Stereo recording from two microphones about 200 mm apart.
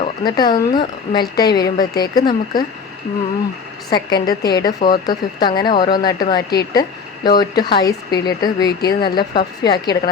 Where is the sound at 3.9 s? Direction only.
20° left (ahead or behind).